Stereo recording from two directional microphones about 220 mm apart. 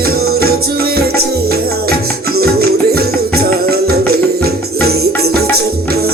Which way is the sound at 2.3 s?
45° right (ahead or behind).